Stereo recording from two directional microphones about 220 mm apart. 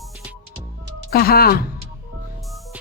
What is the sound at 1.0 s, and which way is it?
Speech, 45° left (ahead or behind).